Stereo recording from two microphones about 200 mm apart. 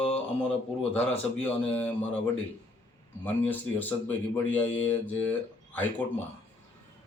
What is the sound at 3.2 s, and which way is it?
Speech, 10° left (ahead or behind).